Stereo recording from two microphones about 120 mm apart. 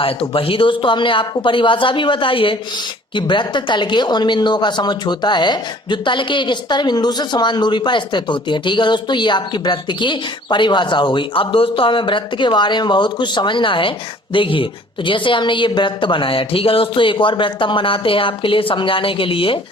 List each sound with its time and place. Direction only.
0.0 s a woman's voice: 50° left (ahead or behind)